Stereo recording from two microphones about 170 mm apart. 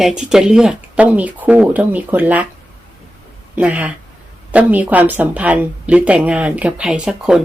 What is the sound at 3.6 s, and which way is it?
Speech, 10° right (ahead or behind).